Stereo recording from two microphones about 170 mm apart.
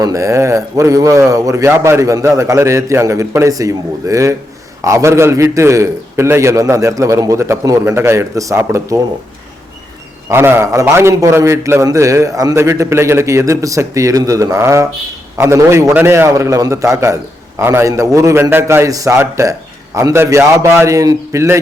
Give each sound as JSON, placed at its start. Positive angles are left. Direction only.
{"t": 0.0, "sound": "a man's voice", "side_deg": -20}
{"t": 10.2, "sound": "a man's voice", "side_deg": -15}